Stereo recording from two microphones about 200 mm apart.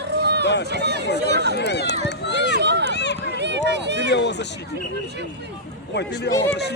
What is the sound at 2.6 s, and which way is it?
Run, 60° right (ahead or behind).